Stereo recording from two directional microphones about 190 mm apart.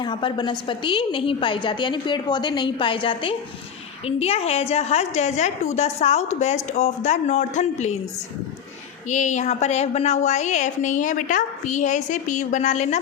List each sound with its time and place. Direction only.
0.0 s a woman's voice: 25° left (ahead or behind)
9.0 s a woman's voice: 40° left (ahead or behind)